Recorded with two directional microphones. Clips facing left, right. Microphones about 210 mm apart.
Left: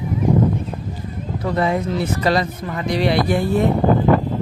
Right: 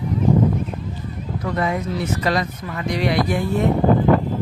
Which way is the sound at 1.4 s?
30° left (ahead or behind).